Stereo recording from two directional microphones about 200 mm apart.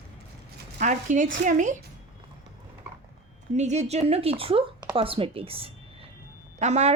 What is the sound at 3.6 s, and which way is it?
A woman's voice, 35° right (ahead or behind).